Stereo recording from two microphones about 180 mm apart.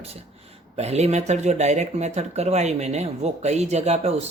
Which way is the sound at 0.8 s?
35° right (ahead or behind).